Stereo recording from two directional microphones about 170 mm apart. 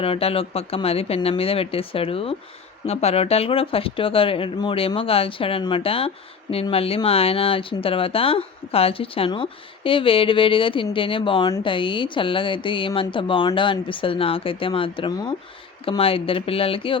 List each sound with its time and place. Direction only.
0.0 s speech: 35° left (ahead or behind)